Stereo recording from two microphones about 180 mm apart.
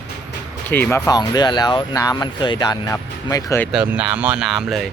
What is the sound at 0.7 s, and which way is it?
Speech, 10° left (ahead or behind).